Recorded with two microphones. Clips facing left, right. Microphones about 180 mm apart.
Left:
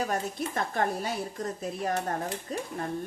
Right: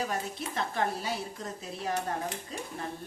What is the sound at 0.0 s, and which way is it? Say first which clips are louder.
Speech: left 3 dB; 50° left (ahead or behind).